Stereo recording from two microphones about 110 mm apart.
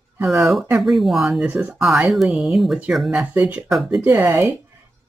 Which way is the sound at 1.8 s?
Centre (ahead or behind).